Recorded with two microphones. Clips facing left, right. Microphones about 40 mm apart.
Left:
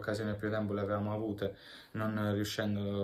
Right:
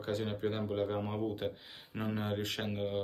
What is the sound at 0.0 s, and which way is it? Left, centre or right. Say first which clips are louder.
Speech: right 1 dB; right.